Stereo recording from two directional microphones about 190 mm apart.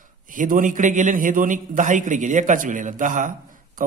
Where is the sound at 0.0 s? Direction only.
45° right (ahead or behind).